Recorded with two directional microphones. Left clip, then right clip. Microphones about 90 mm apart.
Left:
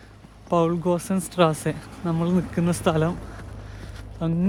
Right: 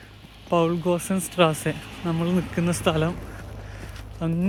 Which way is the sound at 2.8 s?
65° left (ahead or behind).